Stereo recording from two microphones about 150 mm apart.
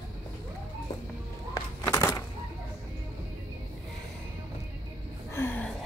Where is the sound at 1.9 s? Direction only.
25° left (ahead or behind).